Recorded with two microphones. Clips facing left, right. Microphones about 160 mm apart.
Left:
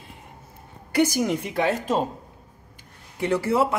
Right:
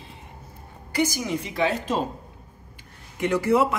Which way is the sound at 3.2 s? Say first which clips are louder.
Right 1 dB; 25° left (ahead or behind).